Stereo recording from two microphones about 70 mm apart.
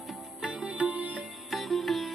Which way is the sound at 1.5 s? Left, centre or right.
Centre.